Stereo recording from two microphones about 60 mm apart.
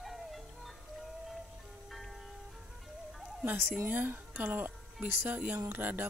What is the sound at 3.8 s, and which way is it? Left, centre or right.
Speech, right.